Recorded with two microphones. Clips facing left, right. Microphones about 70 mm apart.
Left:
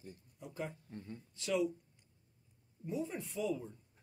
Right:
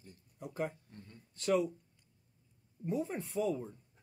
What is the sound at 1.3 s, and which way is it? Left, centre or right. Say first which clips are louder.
Speech: right 3 dB; right.